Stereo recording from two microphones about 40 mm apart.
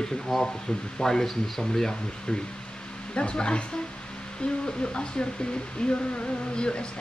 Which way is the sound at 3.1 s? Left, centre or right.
Left.